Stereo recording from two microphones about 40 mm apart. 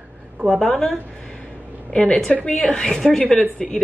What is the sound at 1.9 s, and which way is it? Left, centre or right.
A woman's voice, left.